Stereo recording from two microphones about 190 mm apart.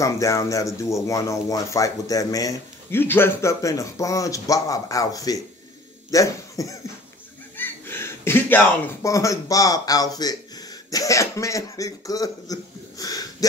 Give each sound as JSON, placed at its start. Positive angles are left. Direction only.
{"t": 0.0, "sound": "speech", "side_deg": 15}